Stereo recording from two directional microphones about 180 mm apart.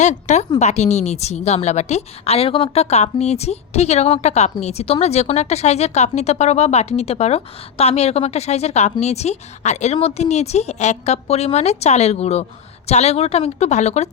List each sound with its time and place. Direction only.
0.0 s speech: 40° left (ahead or behind)